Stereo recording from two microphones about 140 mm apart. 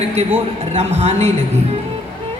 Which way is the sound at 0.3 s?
45° right (ahead or behind).